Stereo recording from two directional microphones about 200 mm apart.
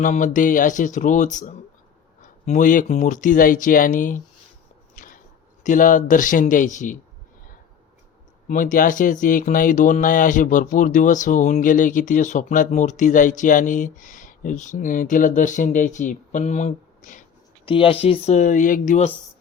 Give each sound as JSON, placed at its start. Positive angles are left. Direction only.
{"t": 0.0, "sound": "speech", "side_deg": 40}
{"t": 4.9, "sound": "a sound", "side_deg": 45}
{"t": 5.6, "sound": "speech", "side_deg": 40}
{"t": 8.4, "sound": "speech", "side_deg": 40}
{"t": 17.7, "sound": "speech", "side_deg": 25}